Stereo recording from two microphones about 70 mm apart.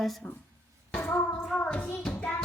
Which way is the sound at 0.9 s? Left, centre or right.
Centre.